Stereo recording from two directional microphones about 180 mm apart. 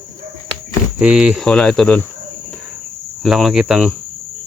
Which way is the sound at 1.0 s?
5° right (ahead or behind).